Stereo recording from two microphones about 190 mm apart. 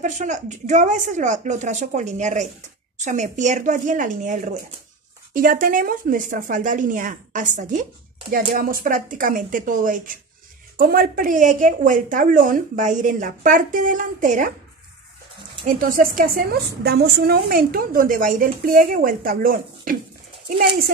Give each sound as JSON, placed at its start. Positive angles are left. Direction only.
{"t": 0.0, "sound": "a woman's voice", "side_deg": -40}
{"t": 15.6, "sound": "a woman's voice", "side_deg": -45}